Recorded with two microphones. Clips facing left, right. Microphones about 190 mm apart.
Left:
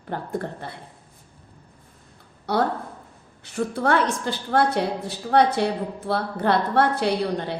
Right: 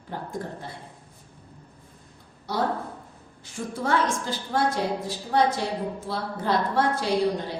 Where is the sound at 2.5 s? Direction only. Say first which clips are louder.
Left 4 dB; 65° left (ahead or behind).